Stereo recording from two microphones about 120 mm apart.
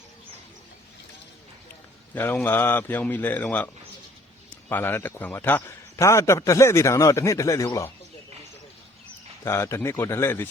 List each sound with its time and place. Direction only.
2.1 s speech: 20° left (ahead or behind)
4.7 s a man's voice: 20° left (ahead or behind)
9.4 s a man's voice: 25° left (ahead or behind)